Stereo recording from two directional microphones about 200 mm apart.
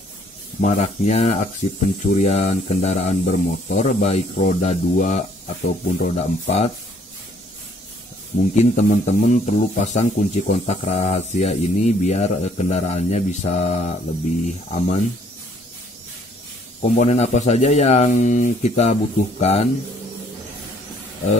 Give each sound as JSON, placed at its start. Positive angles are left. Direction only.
{"t": 0.6, "sound": "speech", "side_deg": 35}
{"t": 8.5, "sound": "speech", "side_deg": 35}
{"t": 16.8, "sound": "speech", "side_deg": 35}